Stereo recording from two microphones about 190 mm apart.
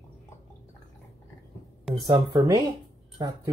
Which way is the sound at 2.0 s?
25° right (ahead or behind).